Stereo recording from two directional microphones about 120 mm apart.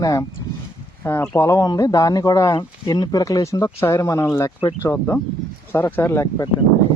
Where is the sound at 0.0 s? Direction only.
30° left (ahead or behind).